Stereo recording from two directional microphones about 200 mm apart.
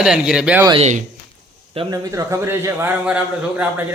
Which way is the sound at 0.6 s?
30° right (ahead or behind).